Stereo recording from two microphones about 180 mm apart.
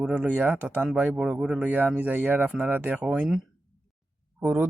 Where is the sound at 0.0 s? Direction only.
5° right (ahead or behind).